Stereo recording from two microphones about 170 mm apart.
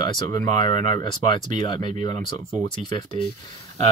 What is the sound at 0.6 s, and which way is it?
Speech, 30° left (ahead or behind).